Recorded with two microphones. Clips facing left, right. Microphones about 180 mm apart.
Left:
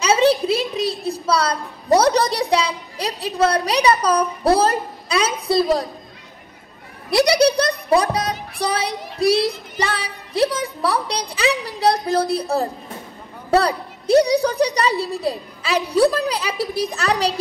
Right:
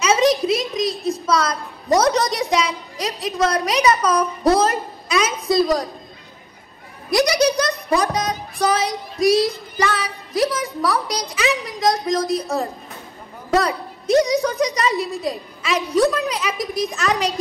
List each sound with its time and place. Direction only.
0.0 s a woman's voice: 30° left (ahead or behind)
7.1 s a woman's voice: 30° left (ahead or behind)